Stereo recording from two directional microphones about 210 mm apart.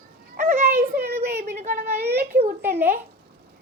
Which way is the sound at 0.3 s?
35° right (ahead or behind).